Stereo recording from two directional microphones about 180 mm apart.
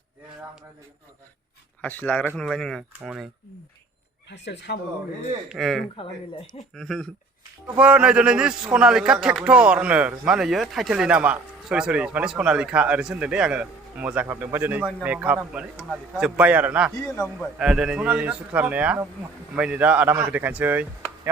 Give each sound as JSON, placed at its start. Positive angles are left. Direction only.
{"t": 1.8, "sound": "speech", "side_deg": 10}
{"t": 4.3, "sound": "speech", "side_deg": 75}
{"t": 5.5, "sound": "a man's voice", "side_deg": 0}